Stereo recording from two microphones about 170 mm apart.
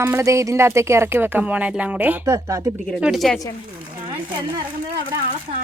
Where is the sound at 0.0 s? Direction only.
15° right (ahead or behind).